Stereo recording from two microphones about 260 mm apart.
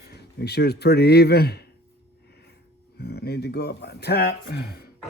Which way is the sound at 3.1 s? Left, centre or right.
Left.